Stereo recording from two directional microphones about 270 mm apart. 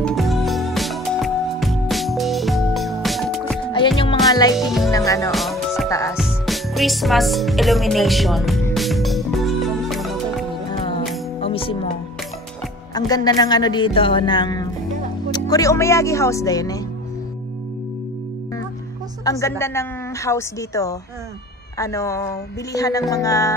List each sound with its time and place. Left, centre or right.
0.0 s music: centre
3.7 s music: centre
4.6 s music: centre
4.9 s music: centre
5.3 s music: centre
5.9 s music: centre
6.1 s music: centre
11.3 s music: centre
12.9 s speech: centre
19.3 s speech: centre